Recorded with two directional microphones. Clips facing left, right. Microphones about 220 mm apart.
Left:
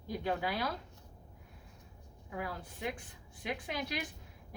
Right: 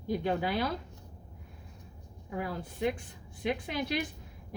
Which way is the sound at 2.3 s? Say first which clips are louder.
Right 5 dB; 25° right (ahead or behind).